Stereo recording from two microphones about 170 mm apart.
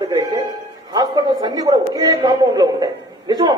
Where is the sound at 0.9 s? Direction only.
25° right (ahead or behind).